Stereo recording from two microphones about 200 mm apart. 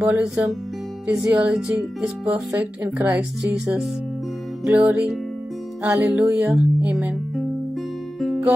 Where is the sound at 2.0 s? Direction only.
5° right (ahead or behind).